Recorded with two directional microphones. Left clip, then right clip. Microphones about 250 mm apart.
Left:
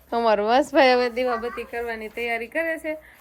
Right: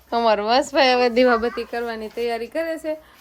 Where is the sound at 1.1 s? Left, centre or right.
Right.